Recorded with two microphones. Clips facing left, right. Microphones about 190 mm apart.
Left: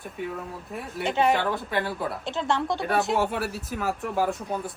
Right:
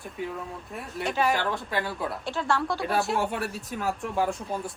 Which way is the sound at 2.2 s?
20° left (ahead or behind).